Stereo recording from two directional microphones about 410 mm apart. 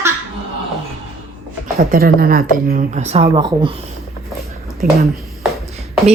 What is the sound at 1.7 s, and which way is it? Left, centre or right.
A woman's voice, right.